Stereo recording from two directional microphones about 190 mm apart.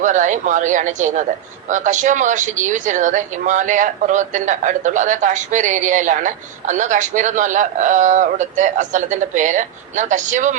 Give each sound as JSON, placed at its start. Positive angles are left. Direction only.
{"t": 0.0, "sound": "a woman's voice", "side_deg": -40}